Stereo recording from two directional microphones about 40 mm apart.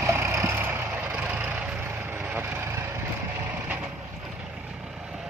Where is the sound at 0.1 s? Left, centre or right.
Right.